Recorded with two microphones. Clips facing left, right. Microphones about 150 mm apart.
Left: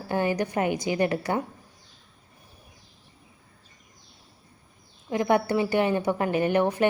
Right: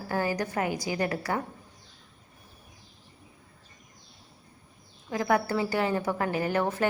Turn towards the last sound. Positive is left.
turn(degrees=20)  # may be behind; listen again after turning